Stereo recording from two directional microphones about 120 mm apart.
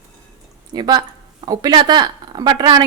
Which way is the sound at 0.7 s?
35° right (ahead or behind).